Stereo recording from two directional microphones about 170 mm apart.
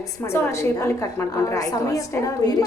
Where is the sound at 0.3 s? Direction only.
15° left (ahead or behind).